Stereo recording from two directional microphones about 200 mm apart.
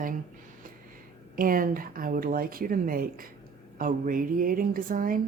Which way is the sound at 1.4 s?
45° right (ahead or behind).